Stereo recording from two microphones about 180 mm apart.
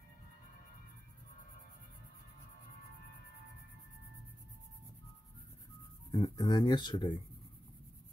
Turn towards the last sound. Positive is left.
turn(degrees=25)  # may be behind; listen again after turning